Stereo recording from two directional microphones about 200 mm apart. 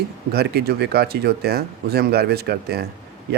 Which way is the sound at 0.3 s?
55° right (ahead or behind).